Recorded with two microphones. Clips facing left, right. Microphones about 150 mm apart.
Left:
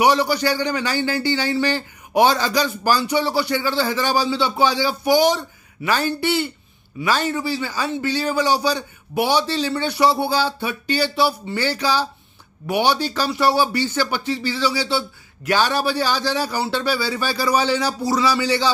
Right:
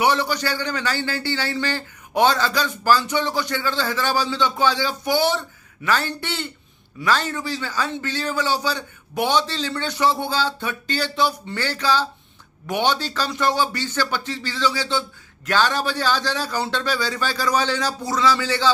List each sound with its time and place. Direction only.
0.0 s a man's voice: 10° left (ahead or behind)